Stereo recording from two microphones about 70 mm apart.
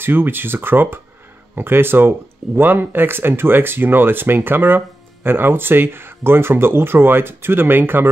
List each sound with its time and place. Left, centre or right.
0.0 s speech: right